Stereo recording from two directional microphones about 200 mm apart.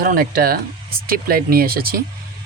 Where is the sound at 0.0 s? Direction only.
45° right (ahead or behind).